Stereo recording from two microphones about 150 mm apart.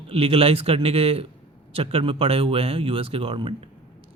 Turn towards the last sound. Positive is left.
turn(degrees=-35)  # may be behind; listen again after turning